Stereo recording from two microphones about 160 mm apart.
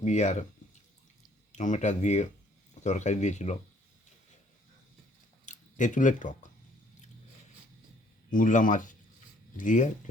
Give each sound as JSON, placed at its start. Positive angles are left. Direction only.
{"t": 0.0, "sound": "speech", "side_deg": 45}
{"t": 1.5, "sound": "speech", "side_deg": 50}
{"t": 5.5, "sound": "speech", "side_deg": 50}
{"t": 8.3, "sound": "speech", "side_deg": 55}